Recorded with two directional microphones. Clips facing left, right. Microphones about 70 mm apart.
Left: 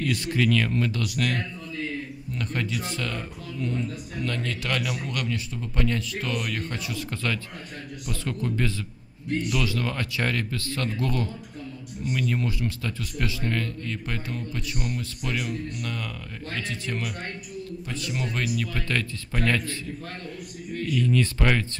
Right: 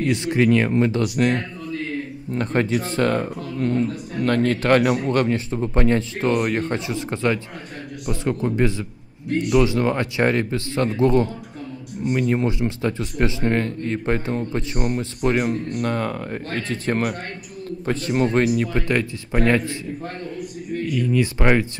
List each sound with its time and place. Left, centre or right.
0.0 s speech: right
20.8 s speech: centre